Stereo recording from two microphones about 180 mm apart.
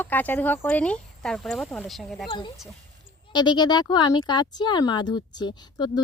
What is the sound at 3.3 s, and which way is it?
Speech, 25° left (ahead or behind).